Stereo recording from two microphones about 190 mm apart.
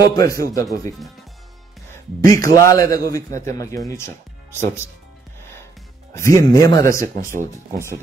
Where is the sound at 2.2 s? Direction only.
15° left (ahead or behind).